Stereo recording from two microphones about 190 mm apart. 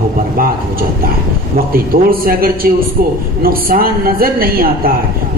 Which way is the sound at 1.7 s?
50° right (ahead or behind).